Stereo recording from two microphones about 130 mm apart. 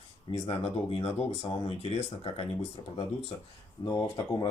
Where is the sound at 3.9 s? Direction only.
25° left (ahead or behind).